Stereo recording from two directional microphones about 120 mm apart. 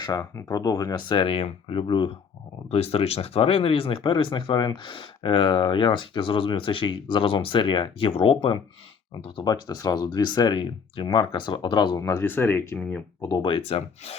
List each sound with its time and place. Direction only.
0.0 s speech: 35° left (ahead or behind)
2.6 s speech: 60° left (ahead or behind); by 13.0 s 20° left (ahead or behind)
13.2 s speech: 40° left (ahead or behind); by 14.2 s 60° left (ahead or behind)